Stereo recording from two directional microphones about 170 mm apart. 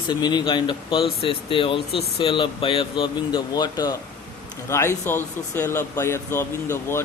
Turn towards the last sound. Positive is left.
turn(degrees=15)  # may be behind; listen again after turning